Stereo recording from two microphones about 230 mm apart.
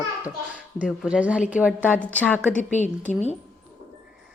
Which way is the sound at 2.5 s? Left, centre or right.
Left.